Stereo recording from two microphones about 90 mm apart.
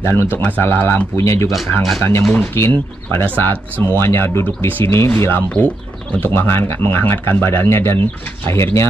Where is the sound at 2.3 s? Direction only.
20° left (ahead or behind).